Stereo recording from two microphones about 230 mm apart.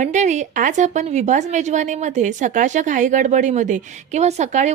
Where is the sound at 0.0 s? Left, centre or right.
Right.